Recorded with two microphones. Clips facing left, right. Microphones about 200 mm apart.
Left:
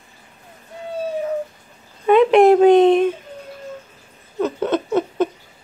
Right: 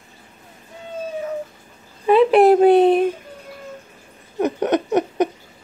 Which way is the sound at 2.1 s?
35° right (ahead or behind).